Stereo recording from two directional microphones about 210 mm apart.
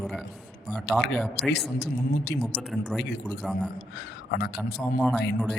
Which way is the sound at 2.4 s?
Centre (ahead or behind).